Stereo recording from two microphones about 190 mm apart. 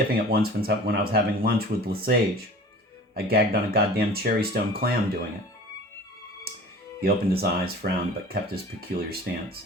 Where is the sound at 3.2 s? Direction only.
55° right (ahead or behind).